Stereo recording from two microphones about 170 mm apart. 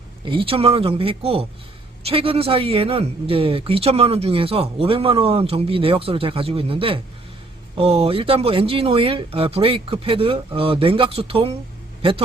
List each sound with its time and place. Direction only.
0.3 s speech: 30° right (ahead or behind)